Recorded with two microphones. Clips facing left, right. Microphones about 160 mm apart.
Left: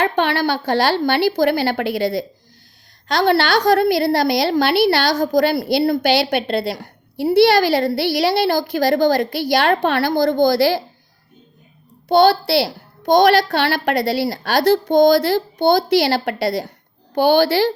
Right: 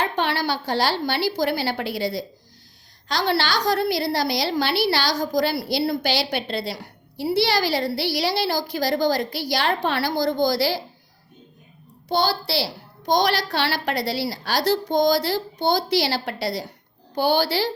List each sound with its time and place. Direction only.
0.0 s a woman's voice: 60° left (ahead or behind)
12.0 s a woman's voice: 60° left (ahead or behind)